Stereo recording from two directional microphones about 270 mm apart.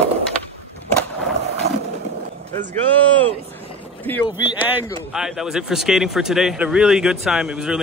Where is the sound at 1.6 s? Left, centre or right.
Right.